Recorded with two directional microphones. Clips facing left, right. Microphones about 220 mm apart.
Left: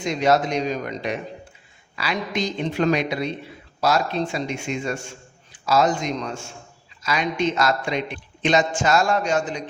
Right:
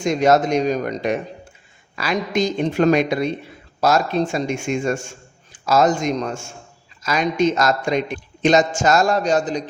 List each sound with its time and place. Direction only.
0.0 s a man's voice: 45° right (ahead or behind)